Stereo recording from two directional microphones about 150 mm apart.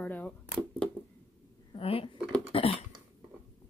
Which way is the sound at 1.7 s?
40° left (ahead or behind).